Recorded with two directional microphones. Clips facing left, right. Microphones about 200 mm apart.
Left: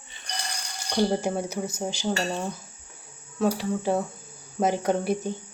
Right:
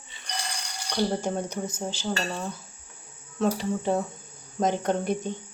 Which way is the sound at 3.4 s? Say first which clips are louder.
Left 1 dB; centre (ahead or behind).